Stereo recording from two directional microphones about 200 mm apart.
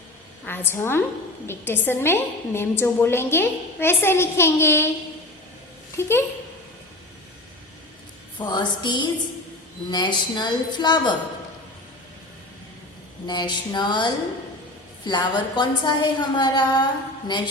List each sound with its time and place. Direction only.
0.4 s a woman's voice: 10° left (ahead or behind)
6.0 s a woman's voice: 10° left (ahead or behind)
8.4 s a woman's voice: 20° left (ahead or behind)
13.2 s a woman's voice: 20° left (ahead or behind)